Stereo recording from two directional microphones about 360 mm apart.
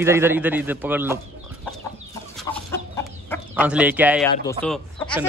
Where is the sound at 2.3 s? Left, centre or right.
Centre.